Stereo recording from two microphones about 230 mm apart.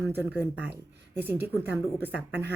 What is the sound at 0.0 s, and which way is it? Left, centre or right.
A woman's voice, centre.